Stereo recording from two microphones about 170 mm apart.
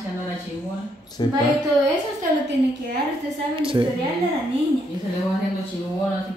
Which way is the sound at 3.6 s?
30° right (ahead or behind).